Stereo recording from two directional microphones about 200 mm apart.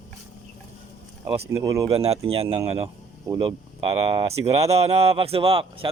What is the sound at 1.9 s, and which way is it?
Speech, 30° right (ahead or behind).